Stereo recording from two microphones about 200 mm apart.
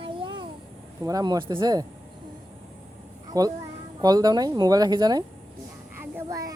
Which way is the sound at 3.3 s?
20° right (ahead or behind).